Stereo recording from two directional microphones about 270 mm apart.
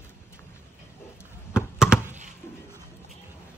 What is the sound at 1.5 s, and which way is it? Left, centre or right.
Computer keyboard, centre.